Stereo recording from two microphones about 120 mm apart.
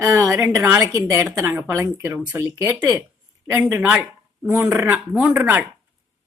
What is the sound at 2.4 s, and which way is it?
Speech, 25° right (ahead or behind).